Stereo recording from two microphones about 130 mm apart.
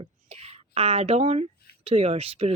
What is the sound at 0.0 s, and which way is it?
Speech, 50° right (ahead or behind).